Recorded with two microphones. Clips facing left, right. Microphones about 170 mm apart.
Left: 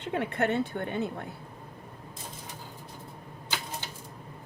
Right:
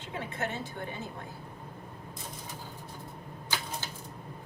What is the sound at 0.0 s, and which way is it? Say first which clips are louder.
A woman's voice: left 7 dB; 65° left (ahead or behind).